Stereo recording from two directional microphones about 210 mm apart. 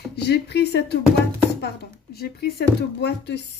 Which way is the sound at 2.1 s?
50° left (ahead or behind).